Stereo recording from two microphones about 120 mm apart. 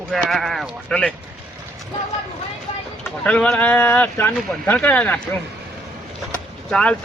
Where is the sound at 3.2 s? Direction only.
10° left (ahead or behind).